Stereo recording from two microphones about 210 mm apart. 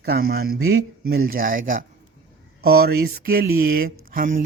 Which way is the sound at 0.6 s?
80° right.